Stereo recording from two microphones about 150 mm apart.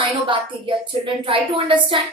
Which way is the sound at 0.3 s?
35° right (ahead or behind).